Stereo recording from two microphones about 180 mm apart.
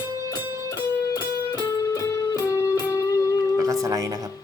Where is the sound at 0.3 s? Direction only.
20° left (ahead or behind).